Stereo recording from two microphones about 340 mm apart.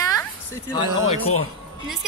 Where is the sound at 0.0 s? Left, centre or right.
Centre.